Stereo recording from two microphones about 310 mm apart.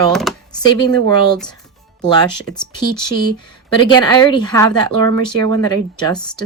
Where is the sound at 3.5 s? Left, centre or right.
Centre.